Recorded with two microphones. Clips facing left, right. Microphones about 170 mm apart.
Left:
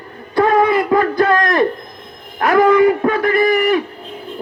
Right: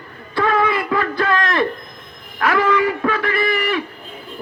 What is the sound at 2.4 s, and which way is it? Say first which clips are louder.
Music: left 6 dB; 45° left (ahead or behind).